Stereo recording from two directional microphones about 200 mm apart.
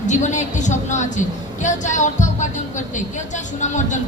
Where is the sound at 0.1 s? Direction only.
35° left (ahead or behind).